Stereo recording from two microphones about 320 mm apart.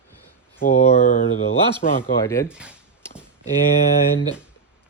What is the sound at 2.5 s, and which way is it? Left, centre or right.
Speech, centre.